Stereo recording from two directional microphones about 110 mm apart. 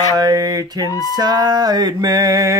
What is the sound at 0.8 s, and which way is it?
Music, 30° left (ahead or behind).